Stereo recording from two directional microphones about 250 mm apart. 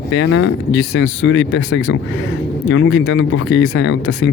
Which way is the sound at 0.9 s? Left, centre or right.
Left.